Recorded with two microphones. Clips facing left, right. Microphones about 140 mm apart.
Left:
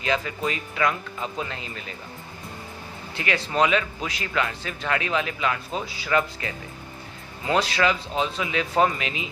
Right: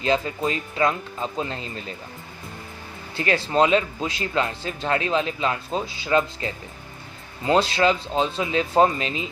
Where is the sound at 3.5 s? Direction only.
30° right (ahead or behind).